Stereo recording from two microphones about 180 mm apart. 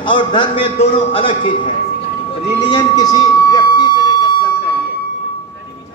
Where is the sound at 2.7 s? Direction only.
25° left (ahead or behind).